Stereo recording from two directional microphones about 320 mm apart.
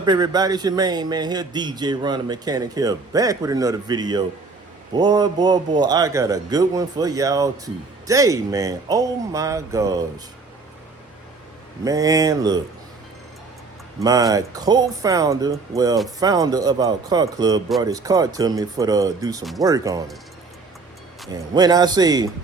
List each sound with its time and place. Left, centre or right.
0.0 s a man's voice: centre
11.9 s a man's voice: centre
14.0 s a man's voice: centre
21.5 s a man's voice: centre